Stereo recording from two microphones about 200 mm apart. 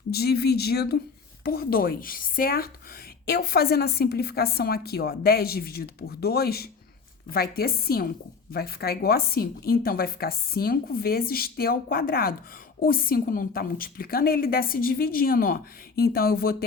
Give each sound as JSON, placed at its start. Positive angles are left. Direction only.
{"t": 0.1, "sound": "a woman's voice", "side_deg": 50}